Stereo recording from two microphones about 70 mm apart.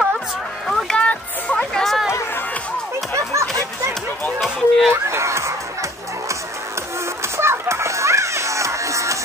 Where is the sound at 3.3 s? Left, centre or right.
Right.